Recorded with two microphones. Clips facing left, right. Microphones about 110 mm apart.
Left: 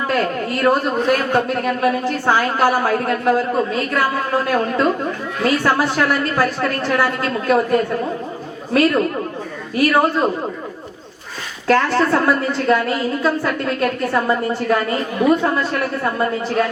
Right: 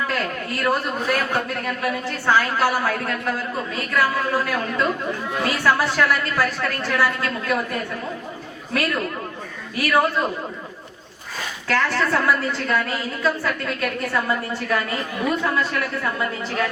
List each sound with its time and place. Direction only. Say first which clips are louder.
0.1 s a man's voice: left 6 dB; 30° left (ahead or behind)
11.7 s a woman's voice: left 6 dB; 35° left (ahead or behind)